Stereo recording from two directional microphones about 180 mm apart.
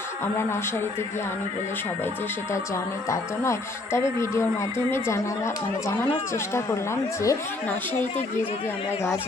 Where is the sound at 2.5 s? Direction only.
15° left (ahead or behind).